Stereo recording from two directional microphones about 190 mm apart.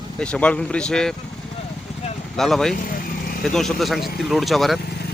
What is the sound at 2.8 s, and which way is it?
Vehicle, 45° left (ahead or behind).